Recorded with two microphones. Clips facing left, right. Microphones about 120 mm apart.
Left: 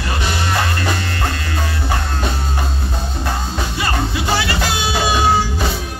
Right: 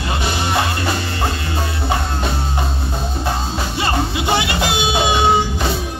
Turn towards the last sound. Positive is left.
turn(degrees=-20)  # may be behind; listen again after turning